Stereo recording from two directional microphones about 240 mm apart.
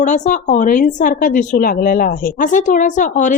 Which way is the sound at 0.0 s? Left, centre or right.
Left.